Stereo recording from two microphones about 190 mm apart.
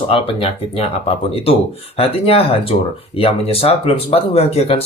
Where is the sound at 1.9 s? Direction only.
30° left (ahead or behind).